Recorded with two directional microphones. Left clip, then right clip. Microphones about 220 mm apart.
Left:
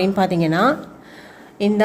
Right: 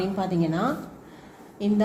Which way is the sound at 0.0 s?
50° left (ahead or behind).